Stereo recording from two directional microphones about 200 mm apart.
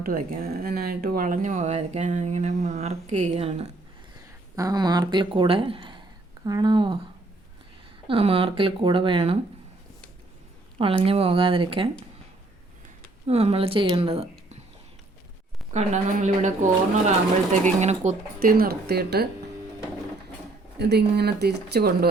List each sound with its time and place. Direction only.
0.0 s speech: 45° right (ahead or behind)
4.5 s speech: 20° right (ahead or behind)
8.0 s speech: 30° right (ahead or behind)
10.8 s speech: 30° right (ahead or behind)
13.2 s speech: 30° right (ahead or behind)
15.7 s speech: 35° right (ahead or behind)
17.7 s speech: 35° right (ahead or behind); by 19.3 s 55° right (ahead or behind)
20.7 s speech: 55° right (ahead or behind)